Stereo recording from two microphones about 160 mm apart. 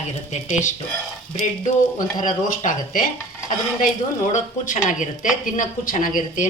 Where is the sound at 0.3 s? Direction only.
50° left (ahead or behind).